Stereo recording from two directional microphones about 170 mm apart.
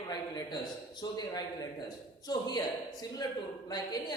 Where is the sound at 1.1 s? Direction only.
25° left (ahead or behind).